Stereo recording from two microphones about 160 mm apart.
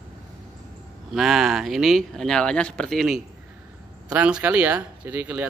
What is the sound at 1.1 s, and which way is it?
Speech, centre (ahead or behind).